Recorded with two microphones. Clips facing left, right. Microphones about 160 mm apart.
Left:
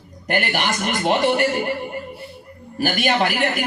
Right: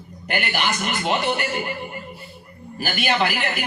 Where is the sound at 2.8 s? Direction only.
45° left (ahead or behind).